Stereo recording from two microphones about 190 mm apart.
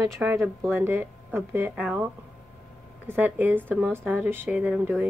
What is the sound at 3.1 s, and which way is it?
A woman's voice, 10° right (ahead or behind).